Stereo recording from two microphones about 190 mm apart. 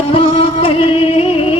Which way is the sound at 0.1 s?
30° left (ahead or behind).